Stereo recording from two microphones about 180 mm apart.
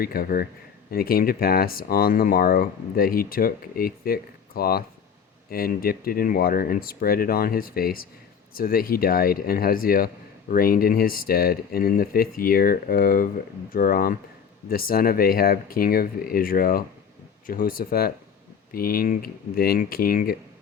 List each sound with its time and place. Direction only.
0.0 s speech: 55° left (ahead or behind)